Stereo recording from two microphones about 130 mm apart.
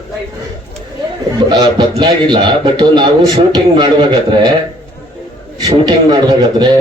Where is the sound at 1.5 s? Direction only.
35° right (ahead or behind).